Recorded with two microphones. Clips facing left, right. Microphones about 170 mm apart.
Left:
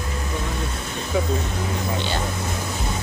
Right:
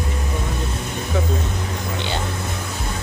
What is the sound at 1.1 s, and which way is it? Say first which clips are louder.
Speech: left 1 dB; 15° left (ahead or behind).